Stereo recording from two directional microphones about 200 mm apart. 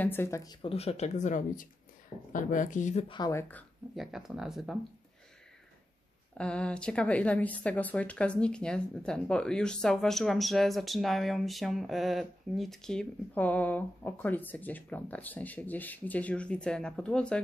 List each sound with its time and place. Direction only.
0.0 s speech: 10° left (ahead or behind); by 3.2 s 35° left (ahead or behind)
3.2 s a woman's voice: 15° left (ahead or behind); by 4.7 s centre (ahead or behind)
6.3 s a woman's voice: 5° left (ahead or behind)